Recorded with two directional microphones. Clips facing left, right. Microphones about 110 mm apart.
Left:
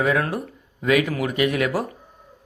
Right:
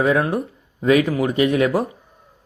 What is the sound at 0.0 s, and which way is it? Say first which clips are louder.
Speech: right 4 dB; 25° right (ahead or behind).